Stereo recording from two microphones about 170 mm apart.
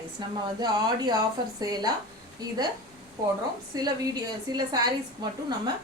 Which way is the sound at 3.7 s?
25° right (ahead or behind).